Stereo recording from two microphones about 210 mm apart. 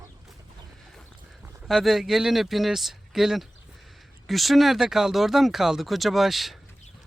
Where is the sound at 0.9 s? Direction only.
Centre (ahead or behind).